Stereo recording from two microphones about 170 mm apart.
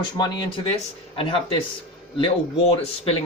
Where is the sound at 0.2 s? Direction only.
25° left (ahead or behind).